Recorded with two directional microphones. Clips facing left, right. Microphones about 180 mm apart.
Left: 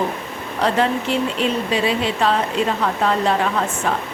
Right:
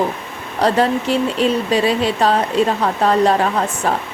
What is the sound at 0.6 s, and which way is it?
Speech, 40° right (ahead or behind).